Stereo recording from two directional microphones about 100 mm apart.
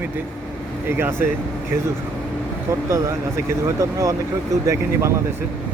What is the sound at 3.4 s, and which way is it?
Speech, 35° right (ahead or behind).